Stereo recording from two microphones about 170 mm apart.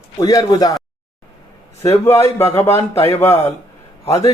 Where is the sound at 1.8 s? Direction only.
15° left (ahead or behind).